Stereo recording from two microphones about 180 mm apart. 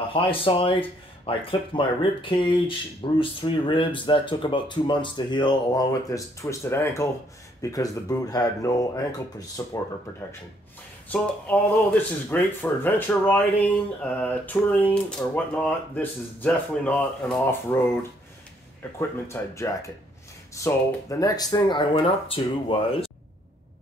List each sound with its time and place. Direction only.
0.1 s speech: 30° left (ahead or behind)
11.1 s speech: 10° left (ahead or behind)
18.9 s speech: 15° left (ahead or behind); by 23.1 s 30° left (ahead or behind)